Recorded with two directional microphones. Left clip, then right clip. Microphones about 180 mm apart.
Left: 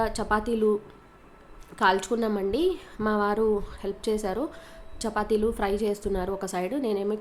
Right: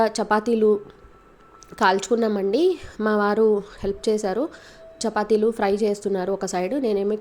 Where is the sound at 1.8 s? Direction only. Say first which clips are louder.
Right 4 dB; 30° right (ahead or behind).